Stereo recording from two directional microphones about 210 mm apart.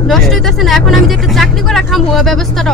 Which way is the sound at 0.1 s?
Centre (ahead or behind).